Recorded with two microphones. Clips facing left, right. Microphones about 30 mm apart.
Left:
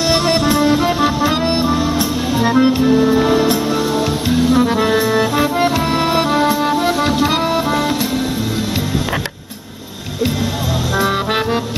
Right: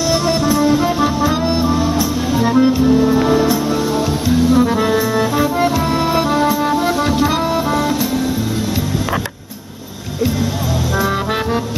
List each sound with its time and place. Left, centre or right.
0.0 s music: left
0.7 s music: left
11.0 s music: left